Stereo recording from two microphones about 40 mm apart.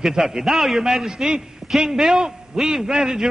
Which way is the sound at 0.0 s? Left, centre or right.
Centre.